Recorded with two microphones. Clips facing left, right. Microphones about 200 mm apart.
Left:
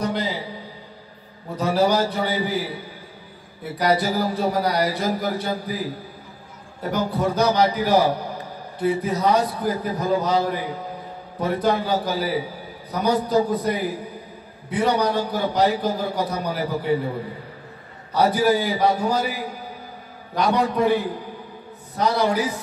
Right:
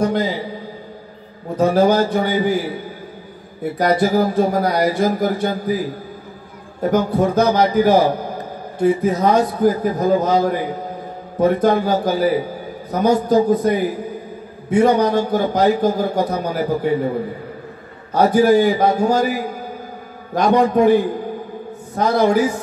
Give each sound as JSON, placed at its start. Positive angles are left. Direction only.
{"t": 0.0, "sound": "a man's voice", "side_deg": -45}
{"t": 1.6, "sound": "a man's voice", "side_deg": -50}
{"t": 3.7, "sound": "a man's voice", "side_deg": -50}
{"t": 6.8, "sound": "a man's voice", "side_deg": -45}
{"t": 18.1, "sound": "a man's voice", "side_deg": -45}